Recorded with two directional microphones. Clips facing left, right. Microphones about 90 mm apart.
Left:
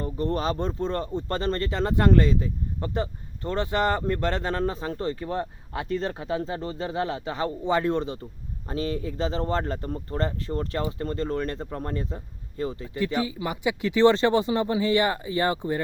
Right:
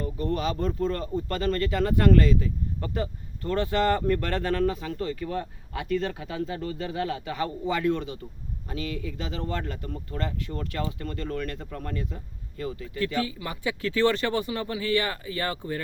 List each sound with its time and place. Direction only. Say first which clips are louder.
0.0 s speech: left 1 dB; 35° left (ahead or behind)